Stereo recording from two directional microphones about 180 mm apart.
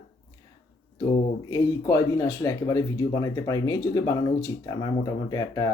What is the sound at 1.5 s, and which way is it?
Speech, 20° left (ahead or behind).